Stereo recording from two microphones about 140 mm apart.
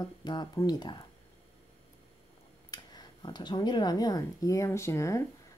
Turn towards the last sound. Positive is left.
turn(degrees=20)  # may be behind; listen again after turning